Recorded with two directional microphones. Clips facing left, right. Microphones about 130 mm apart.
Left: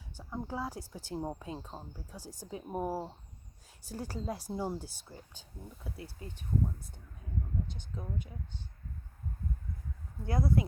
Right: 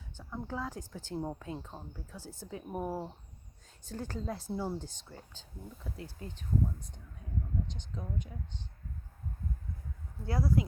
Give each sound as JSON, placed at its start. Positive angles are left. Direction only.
{"t": 0.2, "sound": "speech", "side_deg": 15}
{"t": 10.2, "sound": "speech", "side_deg": 25}